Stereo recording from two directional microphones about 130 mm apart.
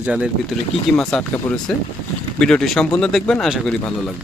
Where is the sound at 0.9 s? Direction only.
5° left (ahead or behind).